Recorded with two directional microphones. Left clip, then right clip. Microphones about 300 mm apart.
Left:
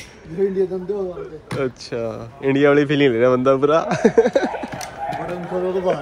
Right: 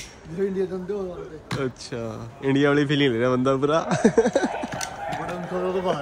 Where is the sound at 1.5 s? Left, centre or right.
Centre.